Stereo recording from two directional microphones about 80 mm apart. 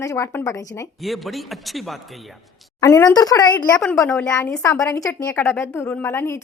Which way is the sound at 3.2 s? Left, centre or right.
Left.